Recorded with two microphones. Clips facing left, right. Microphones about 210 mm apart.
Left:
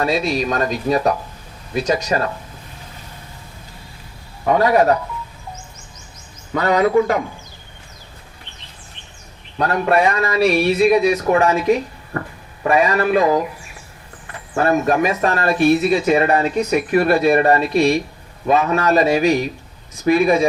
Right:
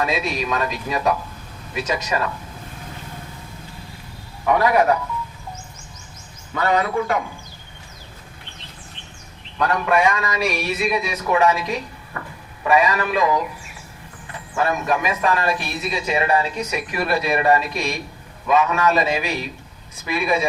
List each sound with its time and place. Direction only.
0.0 s speech: 35° left (ahead or behind)
4.4 s speech: 35° left (ahead or behind)
6.5 s speech: 40° left (ahead or behind)
9.6 s speech: 35° left (ahead or behind)
14.5 s speech: 40° left (ahead or behind)